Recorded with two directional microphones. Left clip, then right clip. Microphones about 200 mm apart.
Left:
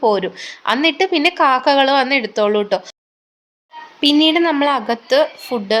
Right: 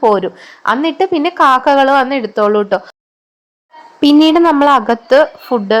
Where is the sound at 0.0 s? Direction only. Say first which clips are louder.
Right 4 dB; 20° right (ahead or behind).